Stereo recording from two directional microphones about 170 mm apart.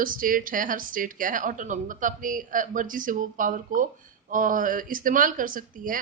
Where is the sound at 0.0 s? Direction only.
55° right (ahead or behind).